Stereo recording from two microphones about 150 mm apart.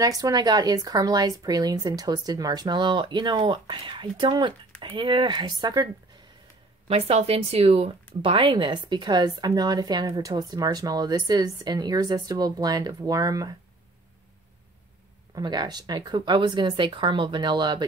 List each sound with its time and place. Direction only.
0.0 s speech: 25° right (ahead or behind)
6.9 s speech: 40° right (ahead or behind); by 13.6 s 25° right (ahead or behind)
15.3 s speech: 30° right (ahead or behind)